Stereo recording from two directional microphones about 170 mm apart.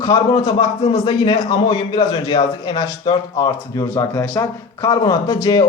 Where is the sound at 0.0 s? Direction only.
20° left (ahead or behind).